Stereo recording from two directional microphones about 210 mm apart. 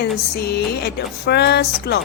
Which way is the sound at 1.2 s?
50° left (ahead or behind).